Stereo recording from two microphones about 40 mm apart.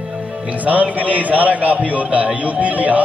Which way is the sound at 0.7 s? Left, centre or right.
Right.